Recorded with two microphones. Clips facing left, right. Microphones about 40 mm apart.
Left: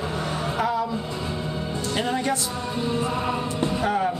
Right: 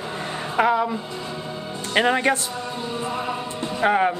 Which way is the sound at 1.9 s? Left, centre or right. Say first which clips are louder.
Right 6 dB; right.